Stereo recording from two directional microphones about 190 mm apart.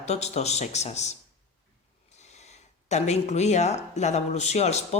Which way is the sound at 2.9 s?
35° left (ahead or behind).